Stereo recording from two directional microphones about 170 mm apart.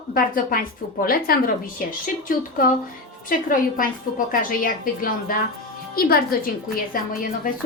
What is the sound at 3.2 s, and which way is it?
A woman's voice, 55° left (ahead or behind).